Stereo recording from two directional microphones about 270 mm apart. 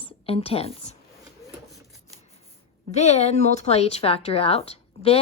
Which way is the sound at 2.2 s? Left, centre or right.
Left.